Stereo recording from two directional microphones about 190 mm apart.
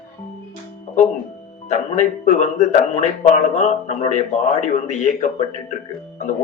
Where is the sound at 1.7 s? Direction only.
40° left (ahead or behind).